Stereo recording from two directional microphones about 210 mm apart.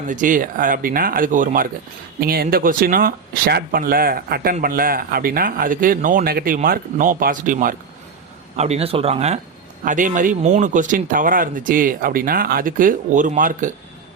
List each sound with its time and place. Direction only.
0.1 s speech: 40° right (ahead or behind)